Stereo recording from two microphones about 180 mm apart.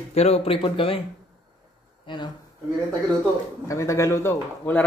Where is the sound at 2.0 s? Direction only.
25° left (ahead or behind).